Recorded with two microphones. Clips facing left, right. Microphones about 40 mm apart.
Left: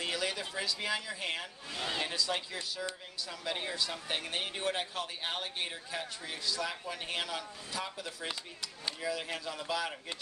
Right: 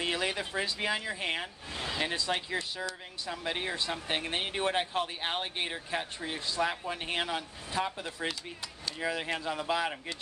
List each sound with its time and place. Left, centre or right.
0.0 s speech: right